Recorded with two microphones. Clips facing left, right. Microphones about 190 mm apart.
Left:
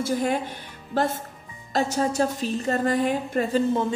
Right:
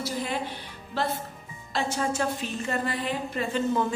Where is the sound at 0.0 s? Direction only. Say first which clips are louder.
Left 6 dB; 50° left (ahead or behind).